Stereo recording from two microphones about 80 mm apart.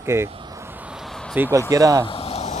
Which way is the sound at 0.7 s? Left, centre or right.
Right.